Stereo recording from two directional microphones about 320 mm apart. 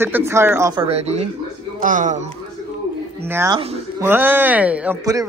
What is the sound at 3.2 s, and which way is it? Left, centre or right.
A man's voice, centre.